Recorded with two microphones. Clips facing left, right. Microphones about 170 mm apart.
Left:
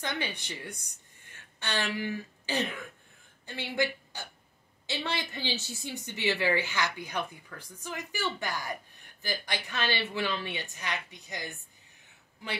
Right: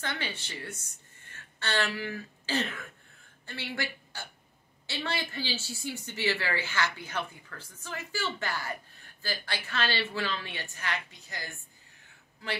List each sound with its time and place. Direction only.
0.0 s a woman's voice: 15° left (ahead or behind)